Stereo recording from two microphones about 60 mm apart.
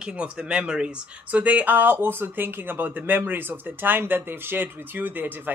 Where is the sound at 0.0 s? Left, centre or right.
Centre.